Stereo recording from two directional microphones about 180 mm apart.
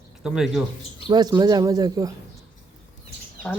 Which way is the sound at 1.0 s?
25° right (ahead or behind).